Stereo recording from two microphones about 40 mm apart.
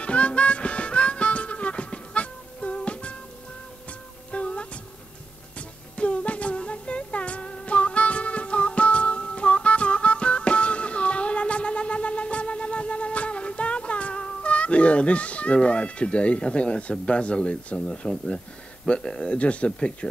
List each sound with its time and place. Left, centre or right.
0.0 s harmonica: left
4.3 s music: left
5.9 s music: left
17.0 s speech: left